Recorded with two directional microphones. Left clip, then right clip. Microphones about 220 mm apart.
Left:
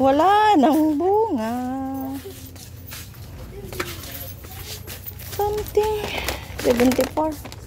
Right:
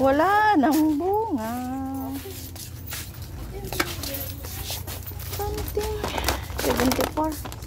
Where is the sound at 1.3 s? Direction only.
45° left (ahead or behind).